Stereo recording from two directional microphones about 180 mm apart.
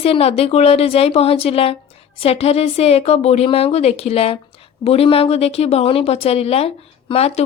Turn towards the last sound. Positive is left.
turn(degrees=35)  # may be behind; listen again after turning